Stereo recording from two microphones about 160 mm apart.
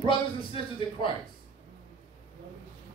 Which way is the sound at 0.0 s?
30° left (ahead or behind).